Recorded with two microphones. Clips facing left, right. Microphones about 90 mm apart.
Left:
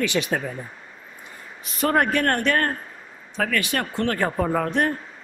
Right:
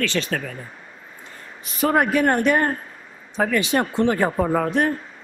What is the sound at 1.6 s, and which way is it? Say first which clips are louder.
A man's voice: right 1 dB; centre (ahead or behind).